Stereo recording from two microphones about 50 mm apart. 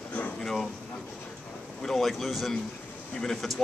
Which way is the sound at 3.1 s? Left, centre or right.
Centre.